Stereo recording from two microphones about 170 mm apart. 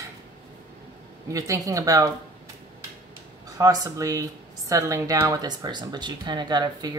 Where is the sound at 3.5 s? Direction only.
20° right (ahead or behind).